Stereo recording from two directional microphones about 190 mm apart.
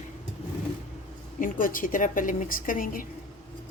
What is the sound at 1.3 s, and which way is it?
Music, 45° left (ahead or behind).